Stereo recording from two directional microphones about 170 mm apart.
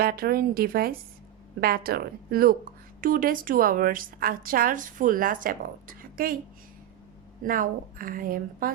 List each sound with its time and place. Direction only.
0.0 s speech: 60° right (ahead or behind)
7.4 s speech: 55° right (ahead or behind)